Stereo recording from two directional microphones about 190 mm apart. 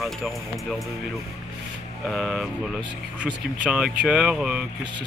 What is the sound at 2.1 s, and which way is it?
Speech, centre (ahead or behind).